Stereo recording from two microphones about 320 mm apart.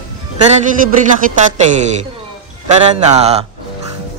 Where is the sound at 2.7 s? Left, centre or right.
Right.